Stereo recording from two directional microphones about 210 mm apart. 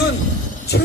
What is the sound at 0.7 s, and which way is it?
Speech, 50° left (ahead or behind).